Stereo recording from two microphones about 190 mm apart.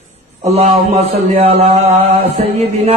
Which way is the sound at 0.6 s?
30° right (ahead or behind).